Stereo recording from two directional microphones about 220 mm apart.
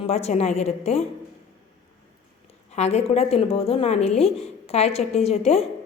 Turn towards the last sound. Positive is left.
turn(degrees=30)  # may be behind; listen again after turning